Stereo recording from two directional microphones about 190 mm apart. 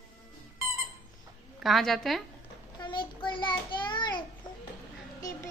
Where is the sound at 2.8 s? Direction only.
25° left (ahead or behind).